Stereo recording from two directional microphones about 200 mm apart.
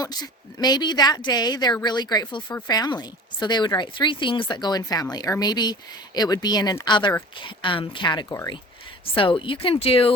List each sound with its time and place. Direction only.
0.0 s speech: 20° left (ahead or behind)